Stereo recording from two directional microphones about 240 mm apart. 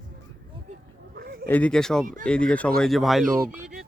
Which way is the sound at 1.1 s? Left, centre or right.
Right.